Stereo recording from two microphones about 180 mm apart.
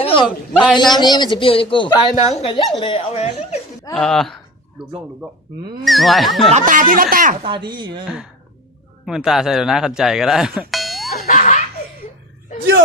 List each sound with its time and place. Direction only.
0.0 s a sound: 30° left (ahead or behind)
0.3 s wild animals: 5° right (ahead or behind)
0.8 s speech: 25° left (ahead or behind)
3.9 s wild animals: centre (ahead or behind)
6.5 s speech: 45° right (ahead or behind)
7.4 s speech: 25° right (ahead or behind)
8.0 s wild animals: 5° right (ahead or behind)
9.0 s speech: 5° right (ahead or behind)
11.2 s laughter: 45° left (ahead or behind)